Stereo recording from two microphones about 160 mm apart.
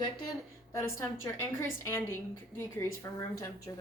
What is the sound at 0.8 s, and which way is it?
A woman's voice, 15° left (ahead or behind).